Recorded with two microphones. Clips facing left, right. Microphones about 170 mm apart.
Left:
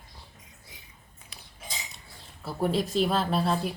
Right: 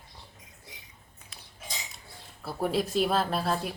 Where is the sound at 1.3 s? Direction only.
Centre (ahead or behind).